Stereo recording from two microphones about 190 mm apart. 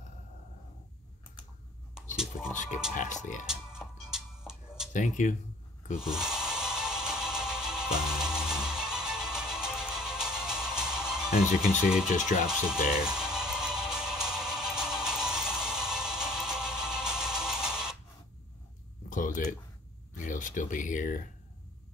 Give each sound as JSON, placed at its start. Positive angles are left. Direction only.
{"t": 2.1, "sound": "a sound", "side_deg": -5}
{"t": 2.5, "sound": "a sound", "side_deg": 40}
{"t": 2.9, "sound": "speech", "side_deg": 40}
{"t": 3.4, "sound": "music", "side_deg": -5}
{"t": 4.9, "sound": "speech", "side_deg": 40}
{"t": 5.9, "sound": "music", "side_deg": -5}
{"t": 12.6, "sound": "music", "side_deg": -5}
{"t": 19.0, "sound": "a sound", "side_deg": 45}
{"t": 20.2, "sound": "speech", "side_deg": 45}